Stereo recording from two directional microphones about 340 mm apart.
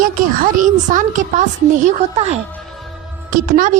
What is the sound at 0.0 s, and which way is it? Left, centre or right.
Speech, right.